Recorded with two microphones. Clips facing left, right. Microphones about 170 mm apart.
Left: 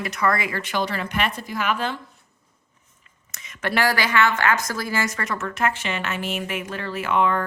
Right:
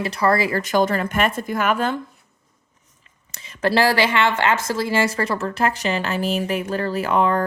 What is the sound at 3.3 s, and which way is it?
A woman's voice, 30° right (ahead or behind).